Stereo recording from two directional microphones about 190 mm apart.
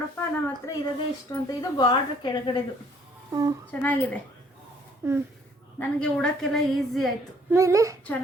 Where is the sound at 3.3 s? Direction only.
20° right (ahead or behind).